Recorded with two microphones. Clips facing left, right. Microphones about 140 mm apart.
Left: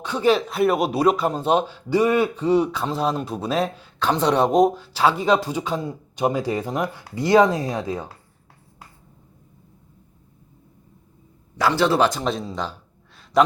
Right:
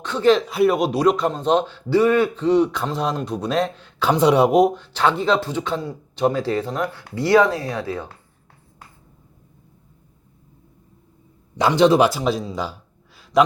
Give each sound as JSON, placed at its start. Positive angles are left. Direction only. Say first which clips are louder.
{"t": 0.0, "sound": "a man's voice", "louder": "right 3 dB", "side_deg": 10}
{"t": 4.0, "sound": "speech", "louder": "right 3 dB", "side_deg": -10}
{"t": 11.5, "sound": "a man's voice", "louder": "right 4 dB", "side_deg": -20}